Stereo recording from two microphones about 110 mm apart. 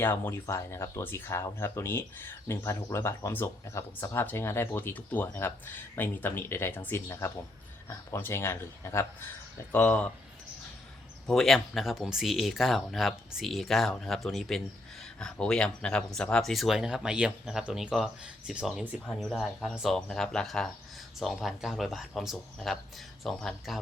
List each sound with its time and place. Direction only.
0.0 s speech: 20° left (ahead or behind)
9.7 s speech: 10° left (ahead or behind)
11.3 s speech: 5° left (ahead or behind)
19.0 s speech: 5° left (ahead or behind)